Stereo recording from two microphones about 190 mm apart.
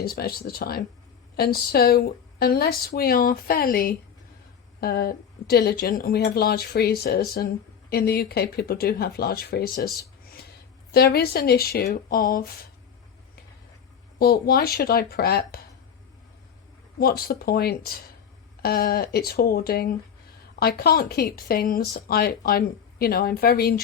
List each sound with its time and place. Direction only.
0.0 s speech: 55° left (ahead or behind)
10.9 s speech: 55° left (ahead or behind)
14.2 s speech: 55° left (ahead or behind)
17.0 s speech: 50° left (ahead or behind)